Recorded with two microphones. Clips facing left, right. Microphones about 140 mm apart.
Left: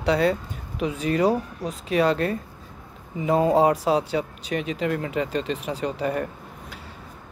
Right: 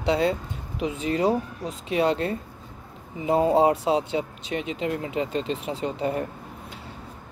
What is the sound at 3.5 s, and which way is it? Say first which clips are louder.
Speech: left 1 dB; 25° right (ahead or behind).